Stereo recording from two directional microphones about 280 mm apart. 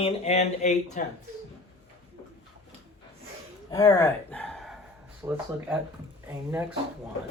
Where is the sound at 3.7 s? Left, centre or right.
Centre.